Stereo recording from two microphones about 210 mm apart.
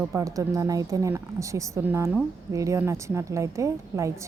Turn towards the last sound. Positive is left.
turn(degrees=-15)  # may be behind; listen again after turning